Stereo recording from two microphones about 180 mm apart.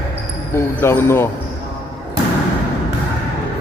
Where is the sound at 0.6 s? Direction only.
15° left (ahead or behind).